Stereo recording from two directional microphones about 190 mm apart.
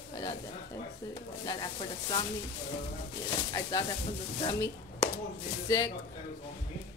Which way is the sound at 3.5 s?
20° left (ahead or behind).